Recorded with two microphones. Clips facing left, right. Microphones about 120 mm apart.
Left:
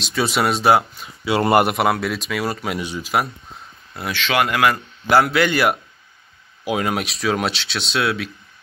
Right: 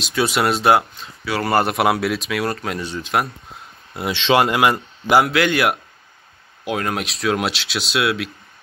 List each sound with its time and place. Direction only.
0.0 s speech: centre (ahead or behind)
1.2 s speech: 25° left (ahead or behind)
1.7 s speech: centre (ahead or behind)
3.9 s speech: 25° right (ahead or behind)
5.2 s speech: centre (ahead or behind)